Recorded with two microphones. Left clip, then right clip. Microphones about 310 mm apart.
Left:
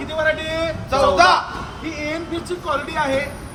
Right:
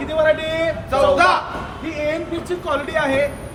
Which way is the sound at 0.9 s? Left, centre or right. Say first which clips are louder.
Left 1 dB; left.